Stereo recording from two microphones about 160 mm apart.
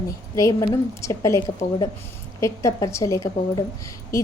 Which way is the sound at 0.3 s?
20° left (ahead or behind).